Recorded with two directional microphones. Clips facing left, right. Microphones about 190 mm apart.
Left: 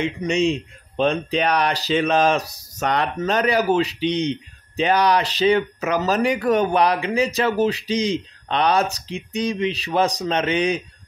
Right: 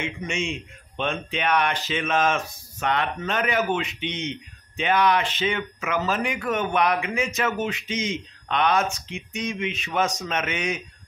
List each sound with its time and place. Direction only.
0.0 s speech: 35° left (ahead or behind)